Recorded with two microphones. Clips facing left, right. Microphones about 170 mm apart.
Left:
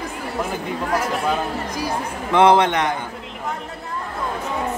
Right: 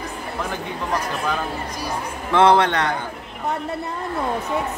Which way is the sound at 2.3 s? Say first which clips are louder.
Left 1 dB; 20° left (ahead or behind).